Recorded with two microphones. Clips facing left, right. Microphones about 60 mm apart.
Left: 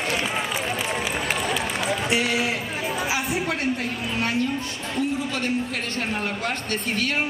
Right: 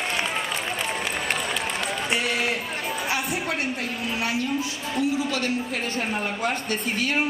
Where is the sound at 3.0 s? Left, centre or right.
Centre.